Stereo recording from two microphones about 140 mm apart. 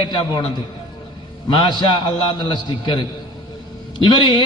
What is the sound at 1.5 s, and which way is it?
A man's voice, 35° left (ahead or behind).